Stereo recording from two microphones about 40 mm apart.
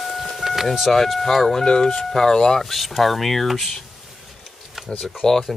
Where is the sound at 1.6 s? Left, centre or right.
Centre.